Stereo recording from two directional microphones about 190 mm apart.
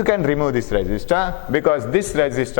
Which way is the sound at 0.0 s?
15° left (ahead or behind).